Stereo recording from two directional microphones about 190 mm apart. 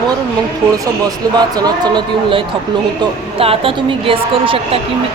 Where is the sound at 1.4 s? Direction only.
20° right (ahead or behind).